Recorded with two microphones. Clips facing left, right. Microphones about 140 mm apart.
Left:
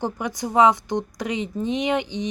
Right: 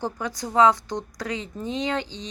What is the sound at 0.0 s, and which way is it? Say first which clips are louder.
Speech: left 3 dB; 15° left (ahead or behind).